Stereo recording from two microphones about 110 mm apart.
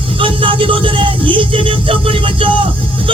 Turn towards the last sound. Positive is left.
turn(degrees=-55)  # may be behind; listen again after turning